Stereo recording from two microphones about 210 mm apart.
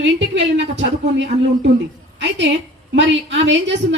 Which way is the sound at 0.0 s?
60° right (ahead or behind).